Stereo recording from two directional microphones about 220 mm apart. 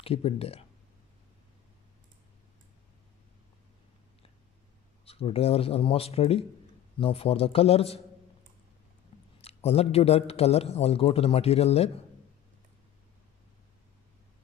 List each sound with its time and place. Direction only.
0.0 s a man's voice: 25° left (ahead or behind)
5.0 s a man's voice: 25° left (ahead or behind)
9.4 s a man's voice: 30° left (ahead or behind)